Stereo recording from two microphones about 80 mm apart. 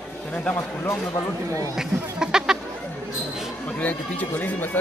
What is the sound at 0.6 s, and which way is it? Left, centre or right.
Speech, left.